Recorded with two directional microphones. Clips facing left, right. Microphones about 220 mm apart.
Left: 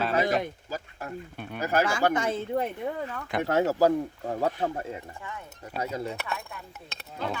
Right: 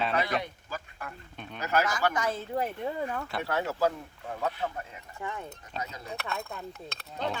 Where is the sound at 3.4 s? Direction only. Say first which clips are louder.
Left 7 dB; 40° left (ahead or behind).